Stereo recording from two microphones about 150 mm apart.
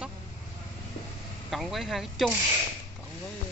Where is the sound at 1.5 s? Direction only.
Centre (ahead or behind).